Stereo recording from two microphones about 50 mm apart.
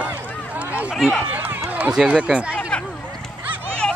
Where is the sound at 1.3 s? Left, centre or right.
Right.